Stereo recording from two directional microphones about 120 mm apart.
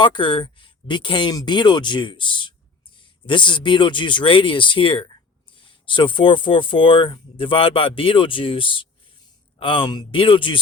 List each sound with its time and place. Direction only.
0.0 s speech: 45° left (ahead or behind)